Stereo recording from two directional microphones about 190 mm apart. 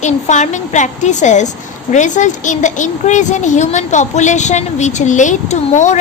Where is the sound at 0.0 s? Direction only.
40° left (ahead or behind).